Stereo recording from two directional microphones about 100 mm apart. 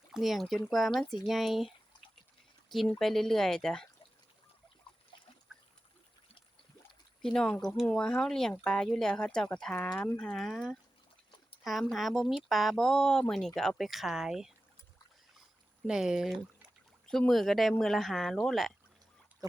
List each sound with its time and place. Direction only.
0.1 s speech: centre (ahead or behind)
5.1 s trickle: 50° left (ahead or behind)
7.2 s speech: 5° left (ahead or behind)
15.9 s speech: 5° right (ahead or behind)